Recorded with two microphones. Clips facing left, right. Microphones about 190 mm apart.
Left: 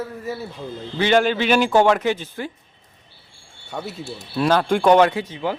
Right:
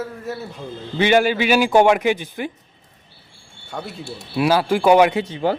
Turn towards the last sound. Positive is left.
turn(degrees=-30)  # may be behind; listen again after turning